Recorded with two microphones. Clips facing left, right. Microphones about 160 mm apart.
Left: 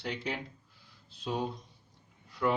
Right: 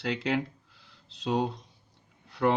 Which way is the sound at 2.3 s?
70° right (ahead or behind).